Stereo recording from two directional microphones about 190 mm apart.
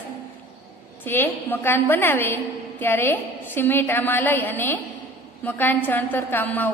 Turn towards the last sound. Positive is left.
turn(degrees=10)  # may be behind; listen again after turning